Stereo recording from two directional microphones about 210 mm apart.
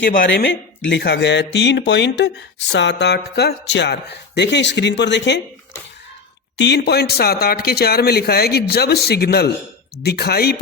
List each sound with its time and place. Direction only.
0.2 s speech: 60° left (ahead or behind)
6.6 s a man's voice: 55° left (ahead or behind)